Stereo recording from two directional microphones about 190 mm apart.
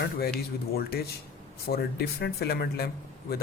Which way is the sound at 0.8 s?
55° left (ahead or behind).